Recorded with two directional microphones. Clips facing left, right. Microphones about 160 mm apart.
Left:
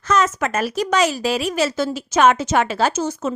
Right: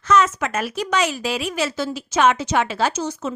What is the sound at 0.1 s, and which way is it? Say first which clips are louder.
A woman's voice: even; 45° left (ahead or behind).